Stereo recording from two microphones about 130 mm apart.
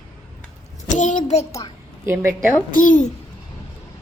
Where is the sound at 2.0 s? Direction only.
20° right (ahead or behind).